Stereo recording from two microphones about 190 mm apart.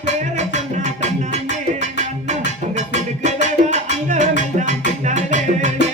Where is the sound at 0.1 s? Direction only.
40° right (ahead or behind).